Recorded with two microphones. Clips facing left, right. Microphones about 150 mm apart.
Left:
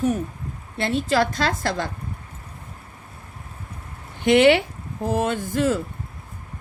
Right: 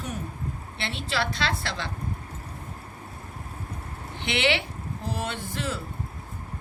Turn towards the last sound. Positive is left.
turn(degrees=45)  # may be behind; listen again after turning